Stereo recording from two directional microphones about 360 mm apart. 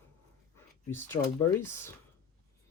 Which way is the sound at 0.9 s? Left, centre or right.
Centre.